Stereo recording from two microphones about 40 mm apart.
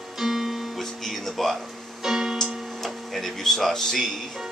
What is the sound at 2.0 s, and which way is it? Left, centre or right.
Music, centre.